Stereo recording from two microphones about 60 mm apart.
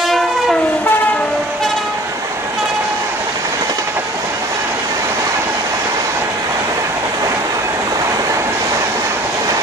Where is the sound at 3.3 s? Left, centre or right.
Right.